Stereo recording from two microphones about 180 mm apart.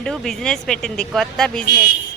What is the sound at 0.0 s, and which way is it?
Speech, centre (ahead or behind).